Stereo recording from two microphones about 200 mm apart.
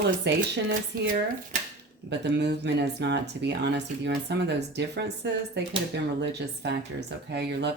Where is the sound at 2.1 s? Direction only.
60° right (ahead or behind).